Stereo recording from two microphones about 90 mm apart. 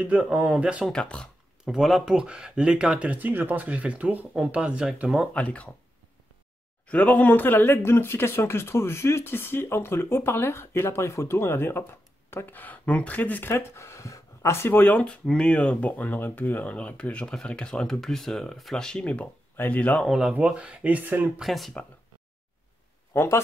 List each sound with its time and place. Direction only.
0.0 s speech: 15° right (ahead or behind)
0.8 s speech: 10° left (ahead or behind)
1.6 s speech: 5° right (ahead or behind)
5.3 s speech: 15° left (ahead or behind)
6.9 s speech: 15° left (ahead or behind)
20.1 s speech: 5° right (ahead or behind)
21.4 s speech: centre (ahead or behind)
23.1 s speech: 30° left (ahead or behind)